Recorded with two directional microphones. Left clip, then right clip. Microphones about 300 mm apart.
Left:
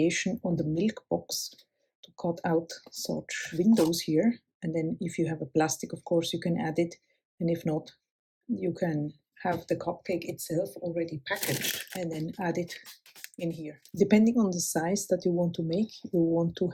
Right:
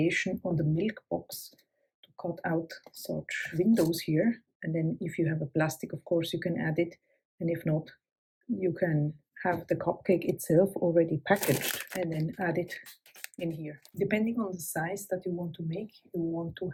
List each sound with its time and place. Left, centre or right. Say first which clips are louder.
0.0 s speech: left 1 dB; centre
16.5 s speech: left 6 dB; centre